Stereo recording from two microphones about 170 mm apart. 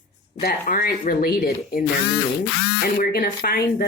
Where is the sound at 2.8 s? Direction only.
60° left (ahead or behind).